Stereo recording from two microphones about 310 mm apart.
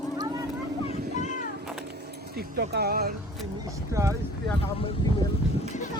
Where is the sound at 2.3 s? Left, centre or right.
Right.